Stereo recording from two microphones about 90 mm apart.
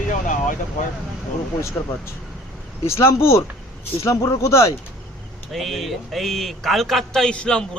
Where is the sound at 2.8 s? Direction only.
30° left (ahead or behind).